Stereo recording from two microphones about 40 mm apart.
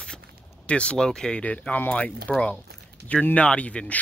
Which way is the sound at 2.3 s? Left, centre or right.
Centre.